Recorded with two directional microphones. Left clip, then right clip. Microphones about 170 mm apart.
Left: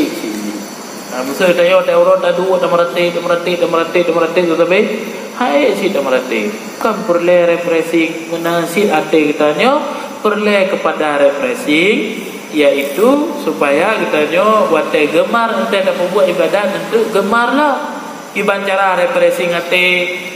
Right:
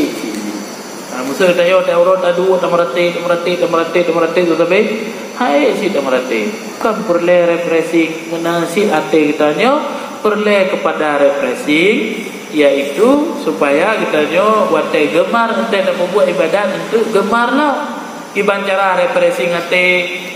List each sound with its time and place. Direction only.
1.4 s a man's voice: 35° left (ahead or behind)